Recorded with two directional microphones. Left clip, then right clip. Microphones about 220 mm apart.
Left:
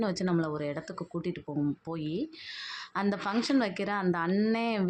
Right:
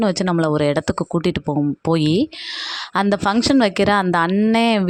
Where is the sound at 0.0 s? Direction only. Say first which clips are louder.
Right 12 dB; 45° right (ahead or behind).